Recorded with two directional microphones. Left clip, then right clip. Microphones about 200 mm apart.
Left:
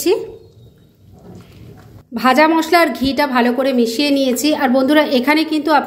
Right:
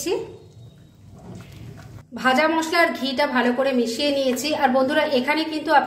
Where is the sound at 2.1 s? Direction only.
40° left (ahead or behind).